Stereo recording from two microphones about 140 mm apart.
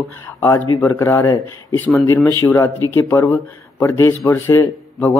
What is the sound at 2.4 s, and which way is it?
A man's voice, 20° left (ahead or behind).